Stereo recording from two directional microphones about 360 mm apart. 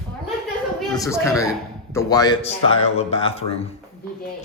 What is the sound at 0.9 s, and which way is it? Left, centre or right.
A man's voice, centre.